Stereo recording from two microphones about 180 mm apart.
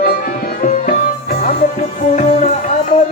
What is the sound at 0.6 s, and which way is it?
Music, 45° left (ahead or behind).